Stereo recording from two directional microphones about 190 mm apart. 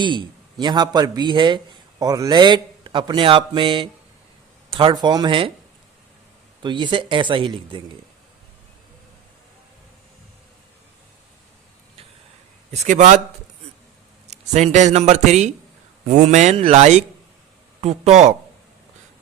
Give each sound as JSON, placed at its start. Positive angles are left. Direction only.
{"t": 0.0, "sound": "a man's voice", "side_deg": -25}
{"t": 6.6, "sound": "a man's voice", "side_deg": -25}
{"t": 12.7, "sound": "speech", "side_deg": -35}
{"t": 14.3, "sound": "a man's voice", "side_deg": -35}